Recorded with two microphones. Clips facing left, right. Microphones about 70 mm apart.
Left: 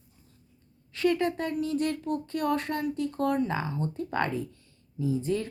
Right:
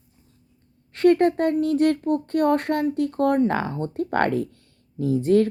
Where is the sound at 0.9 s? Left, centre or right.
Right.